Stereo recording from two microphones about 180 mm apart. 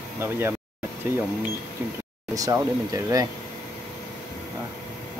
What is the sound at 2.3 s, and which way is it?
Speech, 20° right (ahead or behind).